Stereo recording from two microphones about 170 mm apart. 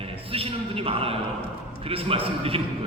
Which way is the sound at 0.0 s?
35° right (ahead or behind).